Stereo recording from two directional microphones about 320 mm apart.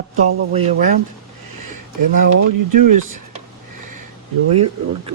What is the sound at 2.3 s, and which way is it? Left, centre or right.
Speech, right.